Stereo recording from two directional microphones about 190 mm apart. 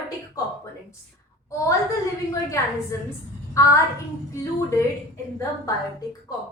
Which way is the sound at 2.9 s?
15° left (ahead or behind).